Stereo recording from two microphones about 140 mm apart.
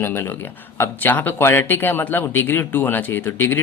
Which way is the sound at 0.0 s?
15° left (ahead or behind).